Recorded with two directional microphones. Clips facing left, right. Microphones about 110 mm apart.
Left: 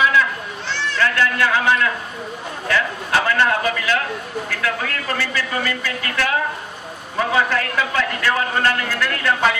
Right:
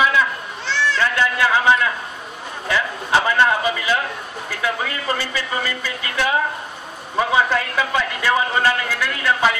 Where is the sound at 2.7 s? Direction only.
20° right (ahead or behind).